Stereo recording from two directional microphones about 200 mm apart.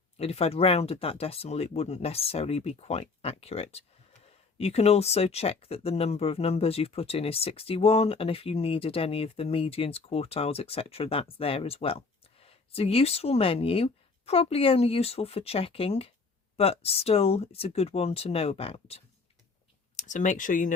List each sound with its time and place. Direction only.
0.2 s speech: 30° left (ahead or behind)